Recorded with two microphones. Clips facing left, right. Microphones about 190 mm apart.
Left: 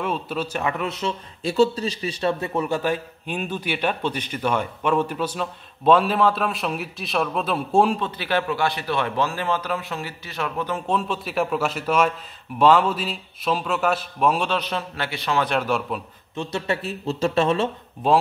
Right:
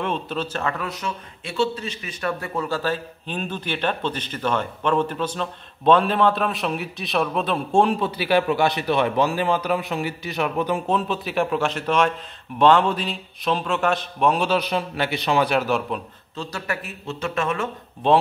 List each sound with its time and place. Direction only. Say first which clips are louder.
0.0 s a man's voice: even; 5° left (ahead or behind)
8.0 s a man's voice: right 4 dB; 10° right (ahead or behind)
10.9 s a man's voice: right 1 dB; centre (ahead or behind)
16.3 s speech: left 4 dB; 25° left (ahead or behind)